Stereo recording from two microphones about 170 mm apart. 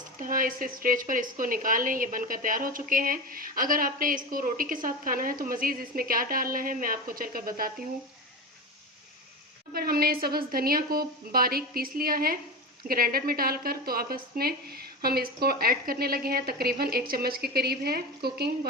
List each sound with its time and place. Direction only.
0.2 s a woman's voice: 55° right (ahead or behind)
9.7 s a woman's voice: 65° right (ahead or behind)